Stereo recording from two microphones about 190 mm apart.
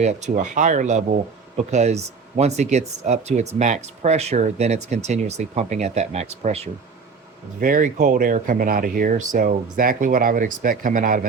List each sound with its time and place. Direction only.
0.0 s speech: 40° right (ahead or behind)
7.6 s speech: 45° right (ahead or behind)